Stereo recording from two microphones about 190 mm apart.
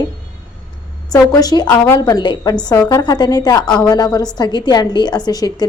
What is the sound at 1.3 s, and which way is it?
A woman's voice, 20° left (ahead or behind).